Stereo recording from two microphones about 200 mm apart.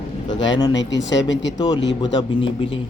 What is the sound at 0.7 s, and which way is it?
Speech, 65° left (ahead or behind).